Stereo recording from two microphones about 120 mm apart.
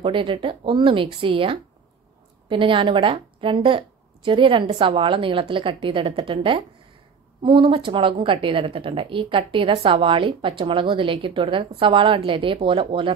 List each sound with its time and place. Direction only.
0.0 s a woman's voice: 45° right (ahead or behind)